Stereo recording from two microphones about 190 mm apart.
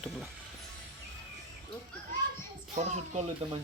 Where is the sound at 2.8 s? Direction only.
35° right (ahead or behind).